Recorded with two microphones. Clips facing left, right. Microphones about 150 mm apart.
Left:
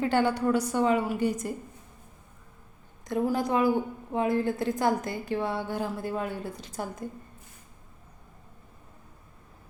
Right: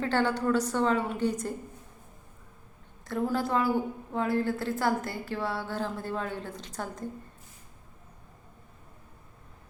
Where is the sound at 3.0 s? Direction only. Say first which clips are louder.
Left 2 dB; 15° left (ahead or behind).